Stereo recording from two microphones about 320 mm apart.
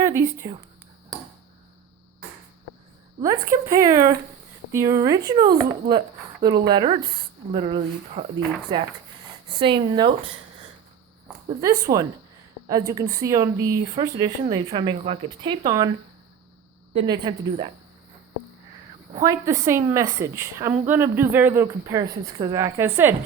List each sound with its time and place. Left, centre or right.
0.0 s speech: centre
3.2 s a woman's voice: centre
9.5 s a woman's voice: centre
11.3 s a woman's voice: centre
16.9 s a woman's voice: centre
19.2 s a woman's voice: centre